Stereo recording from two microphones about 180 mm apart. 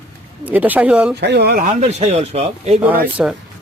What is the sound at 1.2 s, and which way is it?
Speech, 65° right (ahead or behind).